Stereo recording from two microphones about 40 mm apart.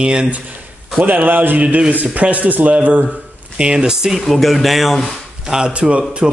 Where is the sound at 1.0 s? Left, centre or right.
Right.